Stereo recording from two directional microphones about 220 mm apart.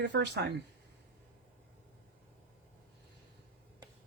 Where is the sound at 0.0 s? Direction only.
50° right (ahead or behind).